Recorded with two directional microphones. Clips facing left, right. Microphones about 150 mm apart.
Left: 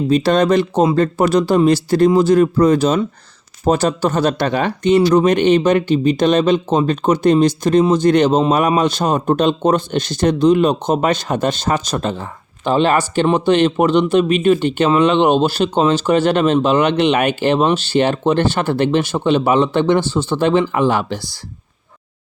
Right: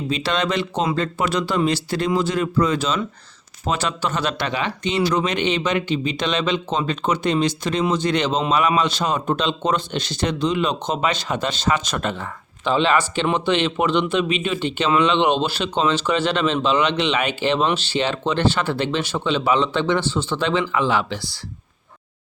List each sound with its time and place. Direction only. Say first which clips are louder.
0.1 s speech: left 9 dB; 45° left (ahead or behind)